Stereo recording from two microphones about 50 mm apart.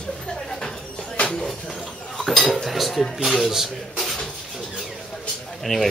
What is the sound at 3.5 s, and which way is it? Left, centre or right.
Rub, centre.